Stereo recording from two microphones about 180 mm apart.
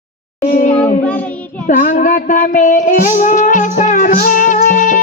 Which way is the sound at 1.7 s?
50° left (ahead or behind).